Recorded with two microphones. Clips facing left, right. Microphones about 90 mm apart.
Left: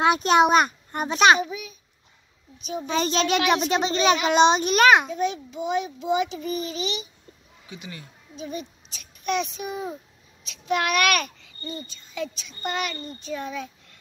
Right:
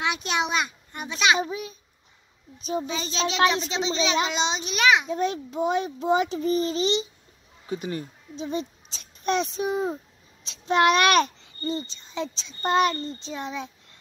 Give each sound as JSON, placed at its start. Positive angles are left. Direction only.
{"t": 0.0, "sound": "a child's voice", "side_deg": 45}
{"t": 1.4, "sound": "a child's voice", "side_deg": -35}
{"t": 2.9, "sound": "a child's voice", "side_deg": 50}
{"t": 5.5, "sound": "a child's voice", "side_deg": -40}
{"t": 8.4, "sound": "a child's voice", "side_deg": -25}
{"t": 13.2, "sound": "a child's voice", "side_deg": -20}